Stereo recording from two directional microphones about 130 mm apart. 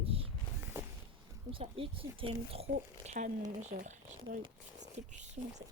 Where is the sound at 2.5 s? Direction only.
55° right (ahead or behind).